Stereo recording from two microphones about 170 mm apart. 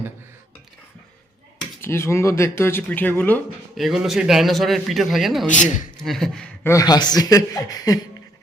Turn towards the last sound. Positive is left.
turn(degrees=20)  # may be behind; listen again after turning